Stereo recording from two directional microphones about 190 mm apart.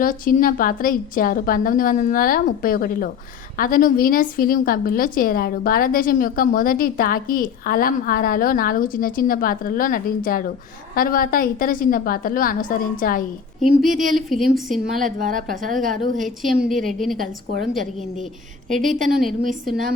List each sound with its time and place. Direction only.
0.0 s a woman's voice: 45° left (ahead or behind)
13.6 s speech: centre (ahead or behind)
15.0 s a woman's voice: 45° right (ahead or behind)
16.2 s speech: centre (ahead or behind)
18.9 s a woman's voice: 45° right (ahead or behind)